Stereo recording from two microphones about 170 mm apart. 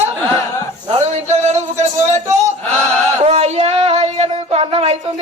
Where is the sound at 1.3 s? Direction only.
40° right (ahead or behind).